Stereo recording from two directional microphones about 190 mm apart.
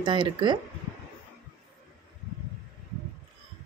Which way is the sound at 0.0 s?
25° right (ahead or behind).